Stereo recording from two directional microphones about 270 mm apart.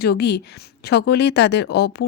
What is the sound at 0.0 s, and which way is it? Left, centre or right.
A woman's voice, left.